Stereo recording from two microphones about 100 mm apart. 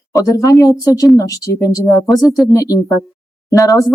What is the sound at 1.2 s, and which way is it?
Speech, 35° left (ahead or behind).